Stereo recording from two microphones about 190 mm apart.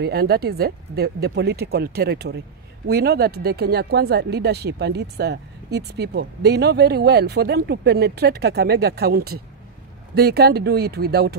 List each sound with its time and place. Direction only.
0.0 s speech: 55° right (ahead or behind)